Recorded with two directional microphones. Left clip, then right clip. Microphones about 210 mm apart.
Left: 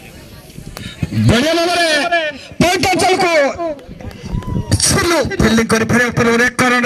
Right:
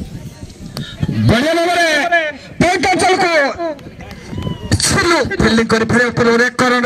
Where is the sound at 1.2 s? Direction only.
60° left (ahead or behind).